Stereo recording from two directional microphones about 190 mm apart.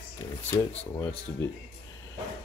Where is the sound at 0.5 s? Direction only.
15° left (ahead or behind).